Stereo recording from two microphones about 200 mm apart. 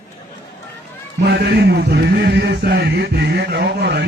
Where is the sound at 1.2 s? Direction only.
55° right (ahead or behind).